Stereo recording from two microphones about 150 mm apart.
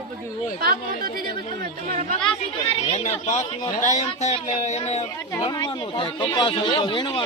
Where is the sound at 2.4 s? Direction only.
45° left (ahead or behind).